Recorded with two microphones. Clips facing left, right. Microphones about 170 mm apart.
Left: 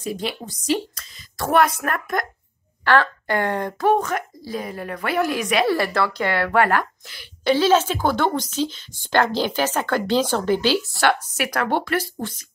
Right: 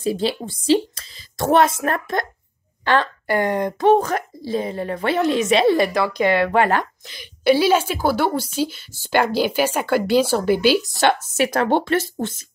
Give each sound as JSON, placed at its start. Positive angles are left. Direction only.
{"t": 0.0, "sound": "a woman's voice", "side_deg": -30}
{"t": 3.9, "sound": "a woman's voice", "side_deg": -30}